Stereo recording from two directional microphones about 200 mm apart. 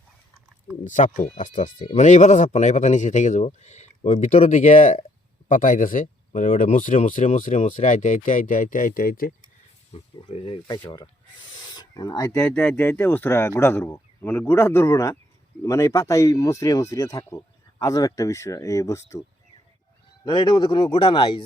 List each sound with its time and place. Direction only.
0.9 s speech: 40° left (ahead or behind)
9.9 s speech: 30° left (ahead or behind); by 19.2 s 15° left (ahead or behind)
20.2 s speech: 25° left (ahead or behind)